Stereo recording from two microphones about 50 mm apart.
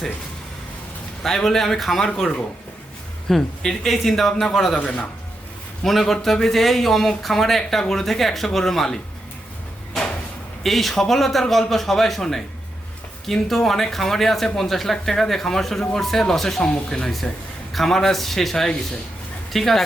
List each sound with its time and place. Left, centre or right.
1.2 s a man's voice: centre
4.8 s speech: left
5.8 s a man's voice: centre
10.6 s a man's voice: centre
17.7 s a man's voice: centre